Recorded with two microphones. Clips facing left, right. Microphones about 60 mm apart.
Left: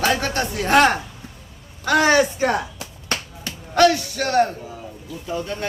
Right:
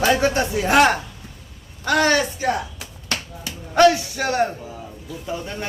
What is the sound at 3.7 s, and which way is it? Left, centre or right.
Speech, centre.